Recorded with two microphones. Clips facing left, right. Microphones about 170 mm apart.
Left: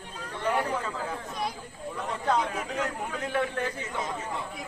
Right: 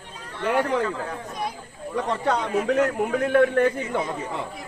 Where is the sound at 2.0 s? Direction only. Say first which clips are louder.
Right 4 dB; 80° right.